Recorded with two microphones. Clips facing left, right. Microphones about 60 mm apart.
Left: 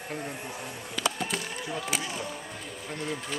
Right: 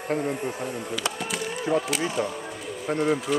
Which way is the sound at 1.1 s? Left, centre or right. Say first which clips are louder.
Right 1 dB; centre.